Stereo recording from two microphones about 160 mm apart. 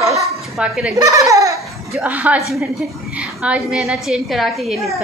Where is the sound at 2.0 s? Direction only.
10° right (ahead or behind).